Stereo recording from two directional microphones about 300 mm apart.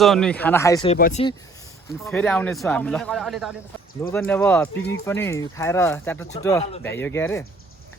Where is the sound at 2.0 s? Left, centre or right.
Centre.